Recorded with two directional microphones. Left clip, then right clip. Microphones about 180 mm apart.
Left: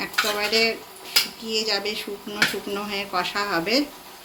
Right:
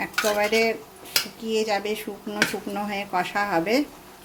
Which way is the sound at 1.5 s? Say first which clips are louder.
Right 1 dB; 50° right (ahead or behind).